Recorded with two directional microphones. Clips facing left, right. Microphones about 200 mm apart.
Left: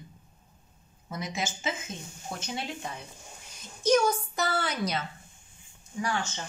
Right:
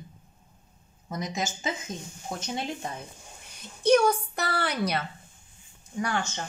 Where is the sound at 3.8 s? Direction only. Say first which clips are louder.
Right 3 dB; 60° right (ahead or behind).